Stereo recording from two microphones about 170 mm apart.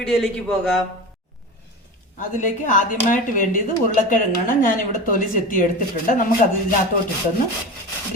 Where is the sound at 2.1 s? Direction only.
50° left (ahead or behind).